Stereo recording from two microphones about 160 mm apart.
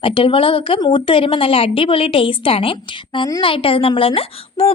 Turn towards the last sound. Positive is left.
turn(degrees=35)  # may be behind; listen again after turning